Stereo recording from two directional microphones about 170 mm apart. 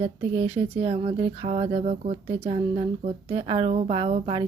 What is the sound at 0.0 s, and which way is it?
A woman's voice, 35° right (ahead or behind).